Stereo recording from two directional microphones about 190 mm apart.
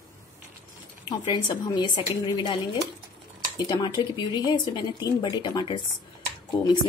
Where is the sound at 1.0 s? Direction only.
25° left (ahead or behind).